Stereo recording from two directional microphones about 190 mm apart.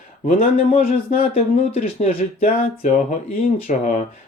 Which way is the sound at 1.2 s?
30° left (ahead or behind).